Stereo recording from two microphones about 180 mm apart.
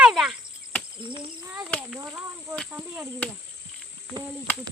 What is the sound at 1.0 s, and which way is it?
Speech, 30° right (ahead or behind).